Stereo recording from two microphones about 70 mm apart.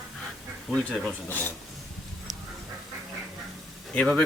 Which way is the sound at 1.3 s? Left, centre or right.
Left.